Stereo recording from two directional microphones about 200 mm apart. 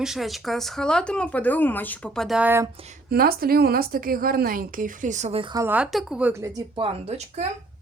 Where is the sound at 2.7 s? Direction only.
35° right (ahead or behind).